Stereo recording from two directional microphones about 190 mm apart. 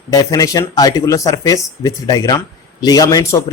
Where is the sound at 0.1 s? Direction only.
15° left (ahead or behind).